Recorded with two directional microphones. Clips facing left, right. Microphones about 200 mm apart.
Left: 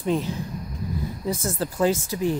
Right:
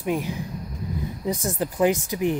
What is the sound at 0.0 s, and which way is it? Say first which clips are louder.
Speech: left 1 dB; 10° right (ahead or behind).